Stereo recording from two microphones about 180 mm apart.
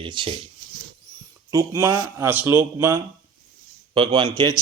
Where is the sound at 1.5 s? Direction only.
15° right (ahead or behind).